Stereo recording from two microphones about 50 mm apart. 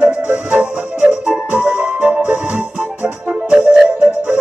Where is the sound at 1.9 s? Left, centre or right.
Right.